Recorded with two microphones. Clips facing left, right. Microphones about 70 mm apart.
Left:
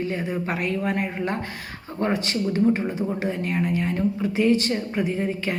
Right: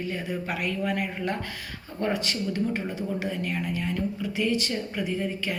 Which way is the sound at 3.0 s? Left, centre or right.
Left.